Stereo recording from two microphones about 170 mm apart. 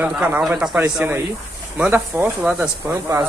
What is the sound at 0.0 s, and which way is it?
Speech, 10° right (ahead or behind).